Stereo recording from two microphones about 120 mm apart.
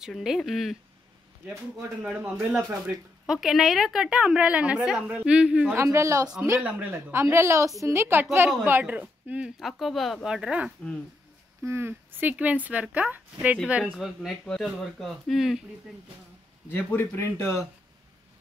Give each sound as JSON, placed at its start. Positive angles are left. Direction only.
{"t": 0.0, "sound": "speech", "side_deg": -5}
{"t": 2.0, "sound": "a woman's voice", "side_deg": -10}
{"t": 3.3, "sound": "a woman's voice", "side_deg": 0}
{"t": 5.8, "sound": "a woman's voice", "side_deg": -25}
{"t": 6.6, "sound": "a woman's voice", "side_deg": -15}
{"t": 11.6, "sound": "a woman's voice", "side_deg": -20}
{"t": 16.7, "sound": "speech", "side_deg": 15}